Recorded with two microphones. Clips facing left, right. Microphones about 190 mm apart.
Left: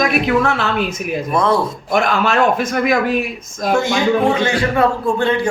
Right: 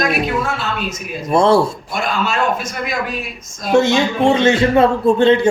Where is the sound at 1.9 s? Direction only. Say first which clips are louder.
Left 6 dB; 60° left (ahead or behind).